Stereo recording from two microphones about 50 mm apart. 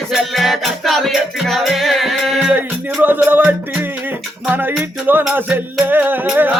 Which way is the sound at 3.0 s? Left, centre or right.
Right.